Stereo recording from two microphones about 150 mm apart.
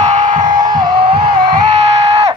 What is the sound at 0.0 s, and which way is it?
Music, 50° right (ahead or behind).